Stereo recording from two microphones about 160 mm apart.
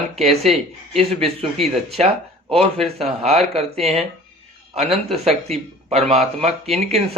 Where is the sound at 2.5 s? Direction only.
40° right (ahead or behind).